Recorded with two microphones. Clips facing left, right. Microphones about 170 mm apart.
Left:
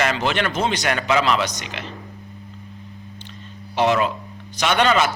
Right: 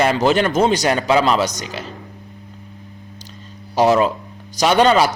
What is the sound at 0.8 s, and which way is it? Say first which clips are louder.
A man's voice: right 4 dB; 30° right (ahead or behind).